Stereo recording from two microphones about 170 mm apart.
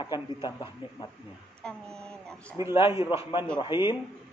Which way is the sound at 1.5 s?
5° left (ahead or behind).